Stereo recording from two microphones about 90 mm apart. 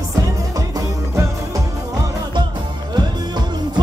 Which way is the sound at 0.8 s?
35° right (ahead or behind).